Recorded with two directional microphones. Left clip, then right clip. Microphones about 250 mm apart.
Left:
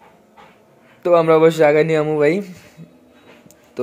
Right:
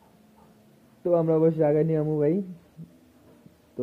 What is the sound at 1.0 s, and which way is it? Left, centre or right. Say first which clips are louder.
Speech: left 10 dB; centre.